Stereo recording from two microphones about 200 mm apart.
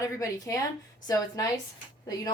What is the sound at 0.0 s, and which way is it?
A woman's voice, 15° left (ahead or behind).